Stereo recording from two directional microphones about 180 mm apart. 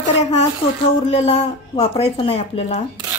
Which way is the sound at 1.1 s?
35° left (ahead or behind).